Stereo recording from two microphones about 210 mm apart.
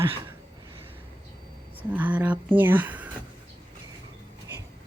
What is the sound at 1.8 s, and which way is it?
Speech, 5° right (ahead or behind).